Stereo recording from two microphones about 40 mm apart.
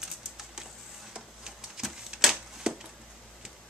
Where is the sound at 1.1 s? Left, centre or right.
Centre.